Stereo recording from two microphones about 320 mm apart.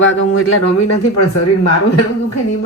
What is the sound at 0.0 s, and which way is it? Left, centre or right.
Speech, left.